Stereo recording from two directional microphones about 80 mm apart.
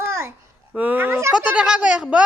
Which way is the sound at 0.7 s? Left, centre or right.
Right.